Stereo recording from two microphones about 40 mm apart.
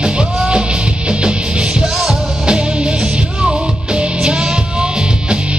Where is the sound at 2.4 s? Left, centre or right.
Right.